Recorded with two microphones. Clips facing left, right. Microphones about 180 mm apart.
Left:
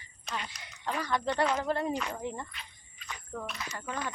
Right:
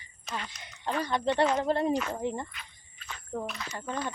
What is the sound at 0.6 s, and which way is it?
Speech, 25° right (ahead or behind).